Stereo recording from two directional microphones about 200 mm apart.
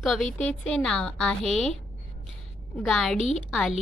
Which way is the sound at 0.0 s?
Centre (ahead or behind).